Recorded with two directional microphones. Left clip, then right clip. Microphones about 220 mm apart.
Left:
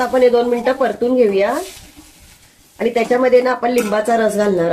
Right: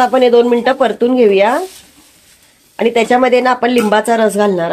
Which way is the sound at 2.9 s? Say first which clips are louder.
Right 2 dB; 45° right (ahead or behind).